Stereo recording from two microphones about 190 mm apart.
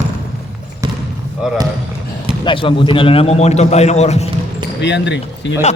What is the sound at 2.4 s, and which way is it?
A man's voice, 25° left (ahead or behind).